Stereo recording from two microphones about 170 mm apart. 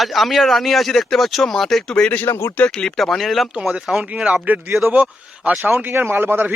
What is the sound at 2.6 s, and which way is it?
Speech, 5° left (ahead or behind).